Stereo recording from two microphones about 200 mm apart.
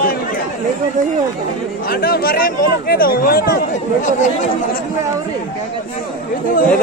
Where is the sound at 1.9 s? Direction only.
50° left (ahead or behind).